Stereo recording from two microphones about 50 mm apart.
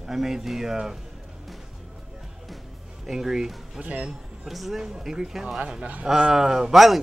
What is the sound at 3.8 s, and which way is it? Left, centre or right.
Speech, right.